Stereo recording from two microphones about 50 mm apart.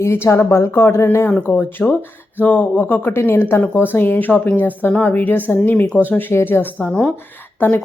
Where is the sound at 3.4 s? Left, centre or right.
Left.